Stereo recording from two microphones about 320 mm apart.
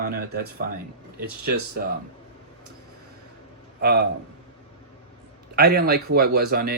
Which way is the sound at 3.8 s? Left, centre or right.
Right.